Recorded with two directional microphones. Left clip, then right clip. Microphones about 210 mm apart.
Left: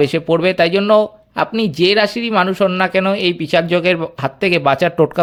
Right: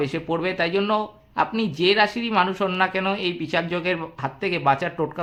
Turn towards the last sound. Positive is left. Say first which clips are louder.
# left 8 dB
turn(degrees=45)  # may be behind; listen again after turning